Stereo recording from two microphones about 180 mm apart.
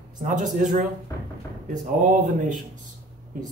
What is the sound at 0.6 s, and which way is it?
Speech, 45° right (ahead or behind).